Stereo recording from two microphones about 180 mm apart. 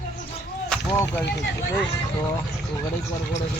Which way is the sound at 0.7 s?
10° left (ahead or behind).